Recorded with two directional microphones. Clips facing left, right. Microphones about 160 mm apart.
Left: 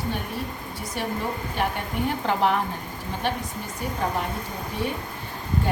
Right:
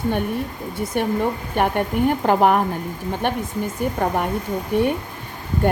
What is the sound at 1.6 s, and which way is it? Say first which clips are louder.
A woman's voice: right 9 dB; 55° right (ahead or behind).